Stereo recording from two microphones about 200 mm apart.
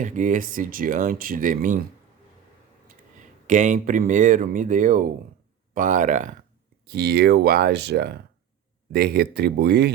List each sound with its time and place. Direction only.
0.0 s speech: 40° right (ahead or behind)
3.4 s speech: 40° right (ahead or behind)
6.8 s speech: 50° right (ahead or behind)